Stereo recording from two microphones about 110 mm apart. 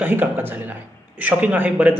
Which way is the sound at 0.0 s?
20° right (ahead or behind).